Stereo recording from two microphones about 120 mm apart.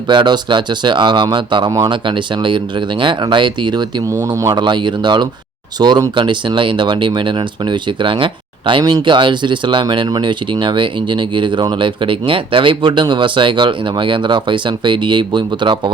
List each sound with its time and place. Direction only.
0.1 s speech: 40° right (ahead or behind)